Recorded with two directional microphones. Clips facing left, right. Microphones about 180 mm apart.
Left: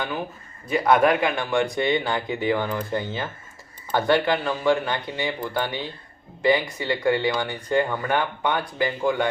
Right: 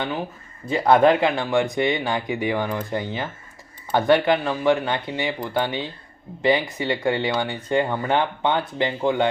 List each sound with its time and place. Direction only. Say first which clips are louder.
0.7 s speech: right 2 dB; 25° right (ahead or behind)